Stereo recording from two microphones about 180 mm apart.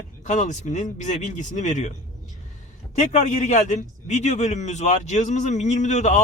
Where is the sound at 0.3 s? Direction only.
40° left (ahead or behind).